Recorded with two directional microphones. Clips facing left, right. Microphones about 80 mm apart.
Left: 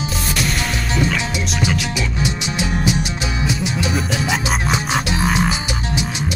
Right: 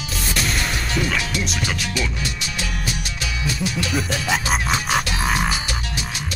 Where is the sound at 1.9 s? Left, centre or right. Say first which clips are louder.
Left 4 dB; centre.